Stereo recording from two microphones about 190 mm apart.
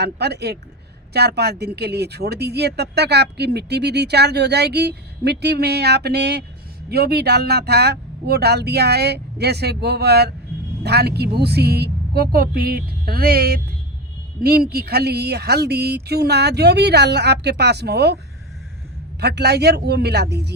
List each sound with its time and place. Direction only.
0.0 s speech: 60° right (ahead or behind)
14.7 s speech: 55° right (ahead or behind)
19.2 s speech: 60° right (ahead or behind)